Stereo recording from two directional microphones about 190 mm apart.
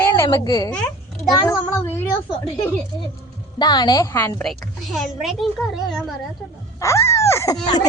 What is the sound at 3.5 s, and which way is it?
Speech, 20° left (ahead or behind).